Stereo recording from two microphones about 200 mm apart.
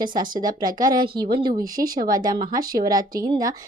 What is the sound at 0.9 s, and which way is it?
Speech, 50° right (ahead or behind).